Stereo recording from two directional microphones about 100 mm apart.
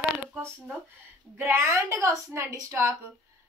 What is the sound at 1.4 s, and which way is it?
A woman's voice, 25° right (ahead or behind).